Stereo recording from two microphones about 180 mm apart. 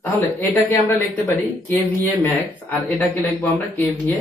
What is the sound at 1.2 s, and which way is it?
Speech, 10° left (ahead or behind).